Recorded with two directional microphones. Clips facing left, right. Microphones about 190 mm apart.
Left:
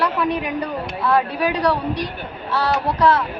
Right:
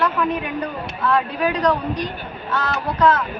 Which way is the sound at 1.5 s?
35° left (ahead or behind).